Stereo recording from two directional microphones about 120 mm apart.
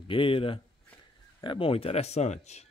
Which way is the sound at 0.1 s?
45° left (ahead or behind).